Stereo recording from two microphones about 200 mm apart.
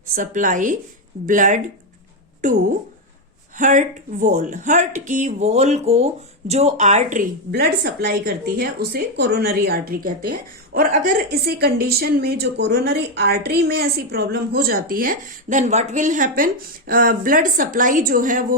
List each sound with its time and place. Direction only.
0.2 s a woman's voice: 40° right (ahead or behind)